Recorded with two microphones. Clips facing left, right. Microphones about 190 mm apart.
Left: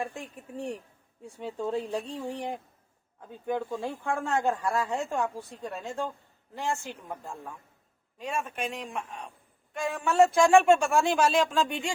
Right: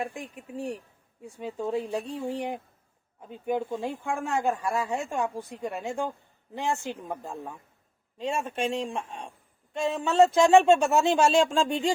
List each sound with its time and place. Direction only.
0.0 s speech: 15° right (ahead or behind)
3.2 s speech: 20° right (ahead or behind)